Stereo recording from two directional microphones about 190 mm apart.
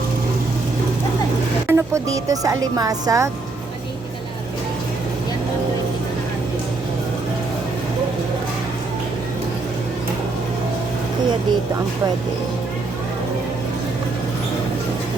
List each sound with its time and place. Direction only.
1.6 s speech: 15° right (ahead or behind)